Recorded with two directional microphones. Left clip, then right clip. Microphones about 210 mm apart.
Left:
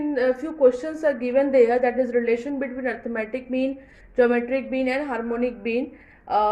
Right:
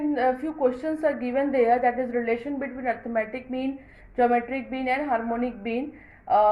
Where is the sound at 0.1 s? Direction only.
30° left (ahead or behind).